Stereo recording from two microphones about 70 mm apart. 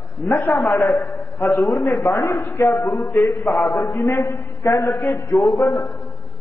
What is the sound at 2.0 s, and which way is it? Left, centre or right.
A man's voice, left.